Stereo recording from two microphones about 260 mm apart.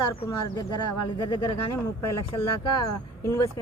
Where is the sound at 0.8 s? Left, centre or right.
Left.